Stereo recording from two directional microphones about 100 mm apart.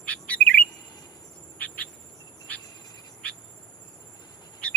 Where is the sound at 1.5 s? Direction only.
15° left (ahead or behind).